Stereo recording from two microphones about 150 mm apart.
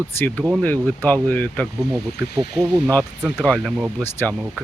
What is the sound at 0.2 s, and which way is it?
Speech, 10° left (ahead or behind).